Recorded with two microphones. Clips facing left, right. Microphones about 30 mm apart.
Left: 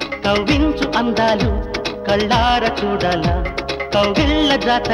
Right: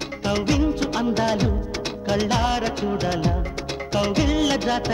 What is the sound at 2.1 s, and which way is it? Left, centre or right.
Music, left.